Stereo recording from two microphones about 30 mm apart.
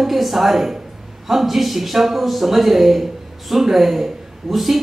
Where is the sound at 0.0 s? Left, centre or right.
Centre.